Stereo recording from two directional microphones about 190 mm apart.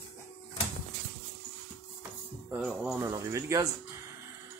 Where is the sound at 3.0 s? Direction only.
15° right (ahead or behind).